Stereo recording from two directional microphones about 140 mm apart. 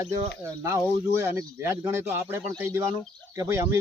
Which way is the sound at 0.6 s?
20° right (ahead or behind).